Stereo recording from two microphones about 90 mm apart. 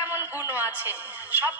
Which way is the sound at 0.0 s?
25° right (ahead or behind).